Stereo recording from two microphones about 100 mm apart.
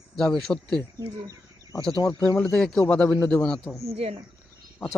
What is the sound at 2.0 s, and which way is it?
Speech, 35° left (ahead or behind).